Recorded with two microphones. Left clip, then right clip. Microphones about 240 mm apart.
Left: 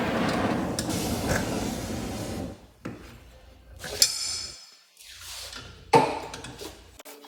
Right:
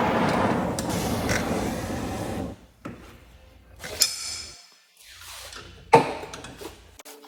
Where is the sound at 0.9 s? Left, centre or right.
Right.